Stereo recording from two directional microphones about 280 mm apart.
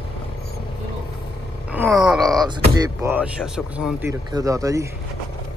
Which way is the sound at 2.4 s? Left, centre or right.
Centre.